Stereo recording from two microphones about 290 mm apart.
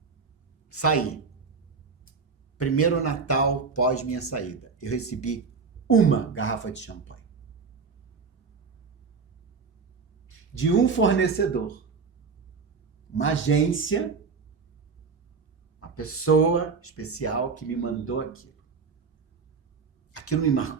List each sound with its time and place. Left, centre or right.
0.7 s speech: left
2.6 s speech: left
10.2 s speech: left
13.1 s speech: left
16.0 s speech: left
20.1 s speech: left